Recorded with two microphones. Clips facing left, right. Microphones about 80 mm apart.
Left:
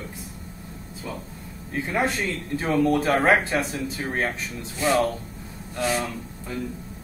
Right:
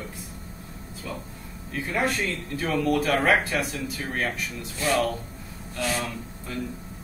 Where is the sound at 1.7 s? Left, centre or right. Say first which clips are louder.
Left 2 dB; left.